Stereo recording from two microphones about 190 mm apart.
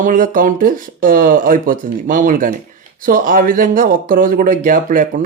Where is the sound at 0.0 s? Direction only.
45° right (ahead or behind).